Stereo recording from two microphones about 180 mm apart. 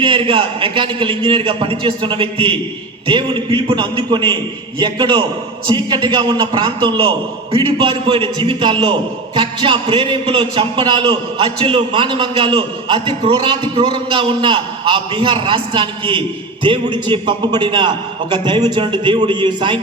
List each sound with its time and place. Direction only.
0.0 s a man's voice: 30° right (ahead or behind)